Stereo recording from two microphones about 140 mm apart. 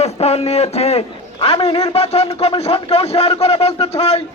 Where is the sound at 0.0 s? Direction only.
50° left (ahead or behind).